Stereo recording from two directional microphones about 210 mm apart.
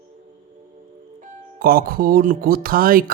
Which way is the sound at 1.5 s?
45° right (ahead or behind).